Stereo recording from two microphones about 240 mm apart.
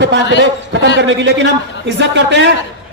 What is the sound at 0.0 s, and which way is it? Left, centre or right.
A man's voice, right.